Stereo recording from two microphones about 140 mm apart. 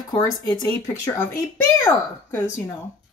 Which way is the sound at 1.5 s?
15° left (ahead or behind).